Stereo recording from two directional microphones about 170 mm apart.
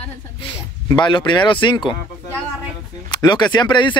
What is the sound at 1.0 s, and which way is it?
Speech, 30° left (ahead or behind).